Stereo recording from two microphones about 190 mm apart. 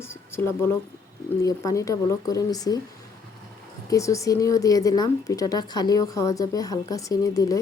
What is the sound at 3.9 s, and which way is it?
Speech, 15° left (ahead or behind).